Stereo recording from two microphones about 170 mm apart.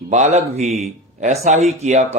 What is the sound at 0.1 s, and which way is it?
Speech, 40° right (ahead or behind).